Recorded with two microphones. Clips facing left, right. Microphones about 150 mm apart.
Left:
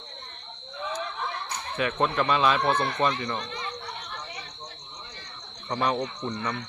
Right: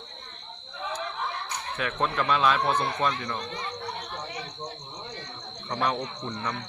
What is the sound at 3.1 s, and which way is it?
Speech, 10° left (ahead or behind).